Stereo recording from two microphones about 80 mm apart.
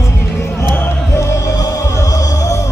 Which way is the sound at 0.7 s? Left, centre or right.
Left.